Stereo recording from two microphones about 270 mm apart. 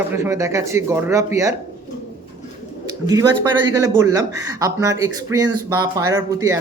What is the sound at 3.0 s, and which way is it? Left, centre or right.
Speech, centre.